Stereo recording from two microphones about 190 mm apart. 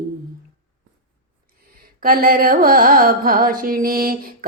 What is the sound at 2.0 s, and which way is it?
Mantra, 50° right (ahead or behind).